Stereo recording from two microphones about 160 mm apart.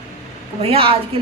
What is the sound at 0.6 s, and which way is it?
Speech, 35° right (ahead or behind).